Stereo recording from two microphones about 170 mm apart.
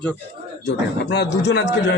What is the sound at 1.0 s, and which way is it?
Speech, 75° left (ahead or behind).